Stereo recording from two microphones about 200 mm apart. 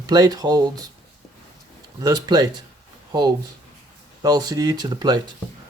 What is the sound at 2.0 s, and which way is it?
Speech, 20° right (ahead or behind).